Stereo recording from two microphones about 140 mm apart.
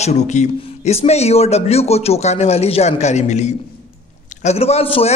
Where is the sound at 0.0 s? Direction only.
55° left (ahead or behind).